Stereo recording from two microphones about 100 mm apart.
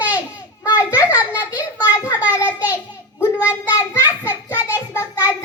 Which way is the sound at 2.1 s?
15° right (ahead or behind).